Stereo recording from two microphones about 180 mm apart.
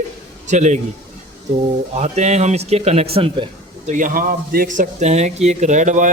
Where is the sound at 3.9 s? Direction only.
50° right (ahead or behind).